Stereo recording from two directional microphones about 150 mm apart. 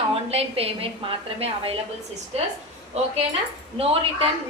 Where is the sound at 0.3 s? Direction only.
40° right (ahead or behind).